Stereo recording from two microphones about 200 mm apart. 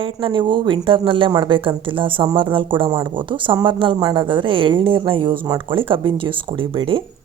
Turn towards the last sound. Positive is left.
turn(degrees=-25)  # may be behind; listen again after turning